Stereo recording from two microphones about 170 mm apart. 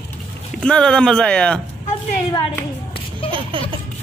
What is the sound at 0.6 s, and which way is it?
Speech, 5° left (ahead or behind).